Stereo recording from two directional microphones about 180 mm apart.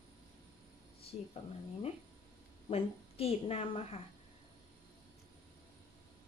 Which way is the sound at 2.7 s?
35° left (ahead or behind).